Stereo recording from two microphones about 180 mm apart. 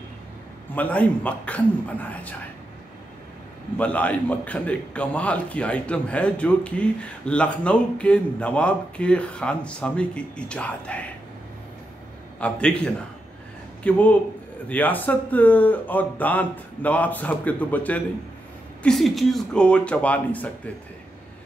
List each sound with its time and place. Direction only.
0.7 s a man's voice: 10° left (ahead or behind)
3.7 s a man's voice: 10° left (ahead or behind)
12.4 s a man's voice: 5° left (ahead or behind)